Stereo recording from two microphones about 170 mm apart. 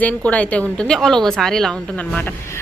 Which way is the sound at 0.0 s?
10° left (ahead or behind).